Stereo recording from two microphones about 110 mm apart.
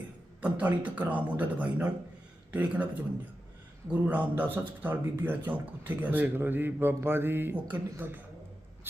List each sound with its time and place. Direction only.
0.4 s a man's voice: 15° right (ahead or behind)
4.0 s a man's voice: 15° right (ahead or behind)